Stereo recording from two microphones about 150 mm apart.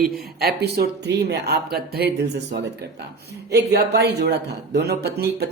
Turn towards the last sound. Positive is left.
turn(degrees=-90)